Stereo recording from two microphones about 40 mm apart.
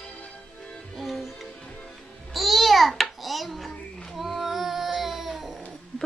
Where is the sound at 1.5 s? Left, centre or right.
Centre.